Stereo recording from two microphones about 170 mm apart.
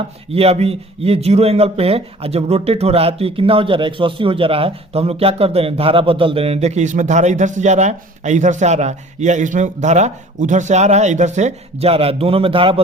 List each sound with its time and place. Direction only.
0.3 s a man's voice: 35° right (ahead or behind)